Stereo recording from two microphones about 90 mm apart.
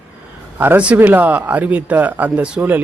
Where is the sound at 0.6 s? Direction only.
20° right (ahead or behind).